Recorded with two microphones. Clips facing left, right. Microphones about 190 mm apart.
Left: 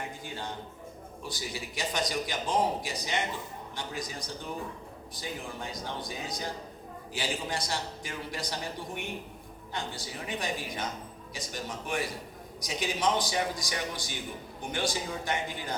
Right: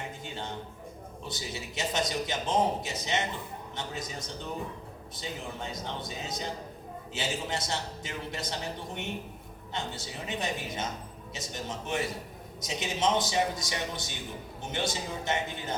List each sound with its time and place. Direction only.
0.3 s a man's voice: 20° right (ahead or behind)
9.7 s a man's voice: 25° right (ahead or behind)